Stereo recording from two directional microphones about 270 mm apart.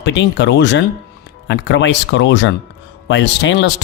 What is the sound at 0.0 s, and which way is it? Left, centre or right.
Speech, left.